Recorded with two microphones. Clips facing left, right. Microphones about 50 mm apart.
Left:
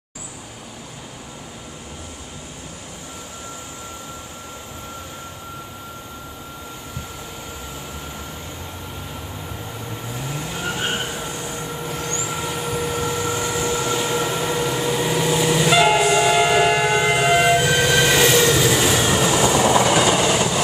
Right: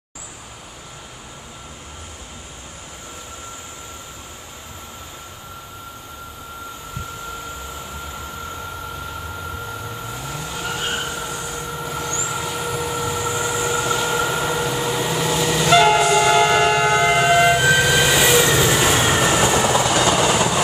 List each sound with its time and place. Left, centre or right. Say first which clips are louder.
10.3 s vehicle: left 1 dB; centre
10.8 s train: left 1 dB; centre
11.8 s vehicle: right 2 dB; right
12.3 s vehicle: right 1 dB; centre
13.0 s vehicle: even; centre
13.8 s train: right 1 dB; centre
18.9 s train: right 1 dB; right
19.7 s train: left 1 dB; centre
20.2 s train: right 1 dB; centre